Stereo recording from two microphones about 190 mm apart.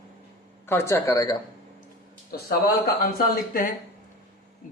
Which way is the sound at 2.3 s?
55° left (ahead or behind).